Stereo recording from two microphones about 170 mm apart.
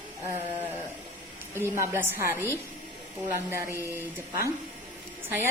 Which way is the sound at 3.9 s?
15° right (ahead or behind).